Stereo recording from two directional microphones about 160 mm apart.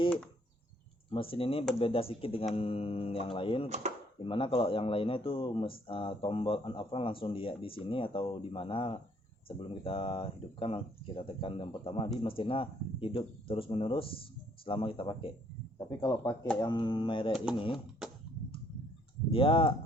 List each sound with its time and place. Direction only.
1.1 s speech: 35° left (ahead or behind)
18.0 s a sound: 5° right (ahead or behind)
19.3 s speech: 35° left (ahead or behind)